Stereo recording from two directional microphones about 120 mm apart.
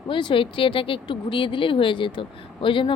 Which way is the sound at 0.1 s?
40° left (ahead or behind).